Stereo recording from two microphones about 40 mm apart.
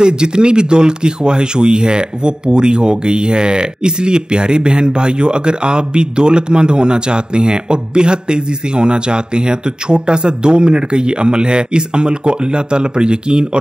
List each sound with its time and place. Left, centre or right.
0.0 s speech: right